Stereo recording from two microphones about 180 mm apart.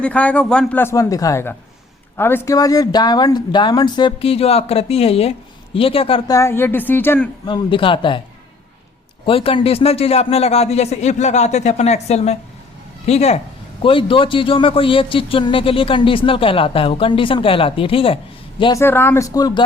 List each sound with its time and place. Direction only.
0.0 s a man's voice: 5° left (ahead or behind); by 6.3 s 30° left (ahead or behind)
6.3 s speech: 15° left (ahead or behind)
7.4 s speech: 25° left (ahead or behind)
9.2 s a man's voice: 30° left (ahead or behind)
18.6 s speech: 15° left (ahead or behind)